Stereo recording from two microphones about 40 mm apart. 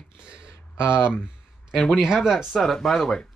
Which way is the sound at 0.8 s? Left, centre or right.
Left.